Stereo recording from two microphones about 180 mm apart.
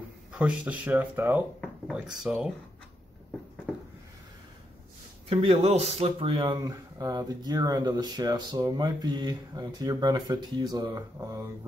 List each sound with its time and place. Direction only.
0.3 s speech: 5° right (ahead or behind)
5.3 s speech: 35° right (ahead or behind); by 11.4 s 20° right (ahead or behind)